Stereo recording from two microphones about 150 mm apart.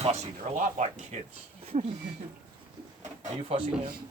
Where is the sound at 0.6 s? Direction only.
55° right (ahead or behind).